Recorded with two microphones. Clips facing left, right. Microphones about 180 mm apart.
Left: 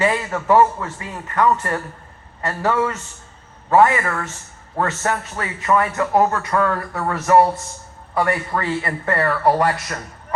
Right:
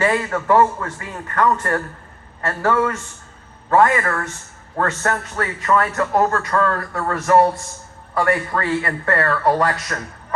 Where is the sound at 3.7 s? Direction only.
15° left (ahead or behind).